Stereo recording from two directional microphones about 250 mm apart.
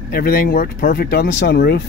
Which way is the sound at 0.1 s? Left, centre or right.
Left.